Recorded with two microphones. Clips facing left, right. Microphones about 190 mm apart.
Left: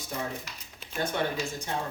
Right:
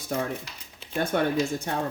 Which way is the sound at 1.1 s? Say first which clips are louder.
Right 8 dB; 55° right (ahead or behind).